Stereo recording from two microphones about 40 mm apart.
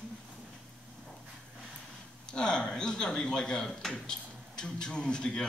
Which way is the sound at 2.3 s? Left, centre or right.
Left.